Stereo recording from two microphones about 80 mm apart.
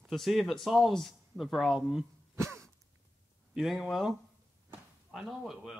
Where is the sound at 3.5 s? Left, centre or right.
Centre.